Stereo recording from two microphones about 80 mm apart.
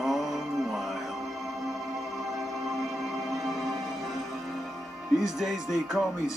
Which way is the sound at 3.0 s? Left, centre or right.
Centre.